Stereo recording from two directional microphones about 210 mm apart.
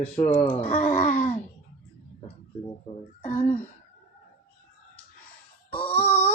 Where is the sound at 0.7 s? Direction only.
40° left (ahead or behind).